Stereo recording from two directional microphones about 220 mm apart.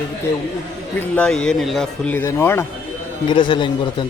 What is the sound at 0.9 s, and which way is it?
Speech, 5° left (ahead or behind).